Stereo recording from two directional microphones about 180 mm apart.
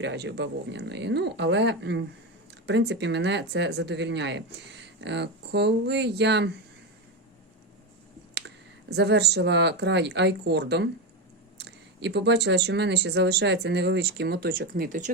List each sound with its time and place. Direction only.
0.0 s speech: 75° right (ahead or behind)
8.4 s speech: 65° right (ahead or behind); by 15.1 s 45° right (ahead or behind)